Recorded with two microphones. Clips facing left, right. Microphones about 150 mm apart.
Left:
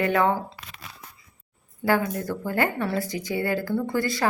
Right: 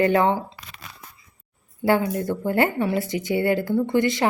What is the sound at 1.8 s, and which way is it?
A woman's voice, 25° right (ahead or behind).